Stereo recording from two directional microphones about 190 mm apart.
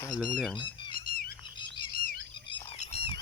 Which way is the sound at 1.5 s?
25° left (ahead or behind).